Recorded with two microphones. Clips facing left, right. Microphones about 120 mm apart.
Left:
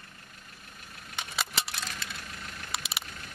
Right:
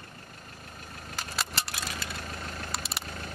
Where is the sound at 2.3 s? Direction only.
40° right (ahead or behind).